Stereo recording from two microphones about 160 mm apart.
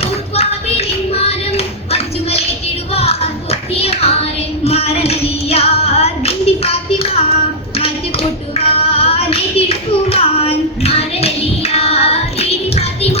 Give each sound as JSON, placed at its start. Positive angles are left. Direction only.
{"t": 0.0, "sound": "a sound", "side_deg": 40}
{"t": 2.9, "sound": "music", "side_deg": 40}
{"t": 4.6, "sound": "child singing", "side_deg": 40}